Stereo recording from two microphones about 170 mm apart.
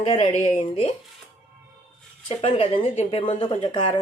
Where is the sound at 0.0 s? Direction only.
40° left (ahead or behind).